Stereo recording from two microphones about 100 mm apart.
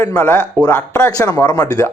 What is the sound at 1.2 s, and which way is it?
Speech, 35° left (ahead or behind).